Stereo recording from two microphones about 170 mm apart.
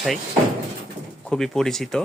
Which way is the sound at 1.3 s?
5° left (ahead or behind).